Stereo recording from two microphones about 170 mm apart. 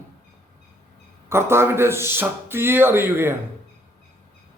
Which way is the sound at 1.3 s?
15° right (ahead or behind).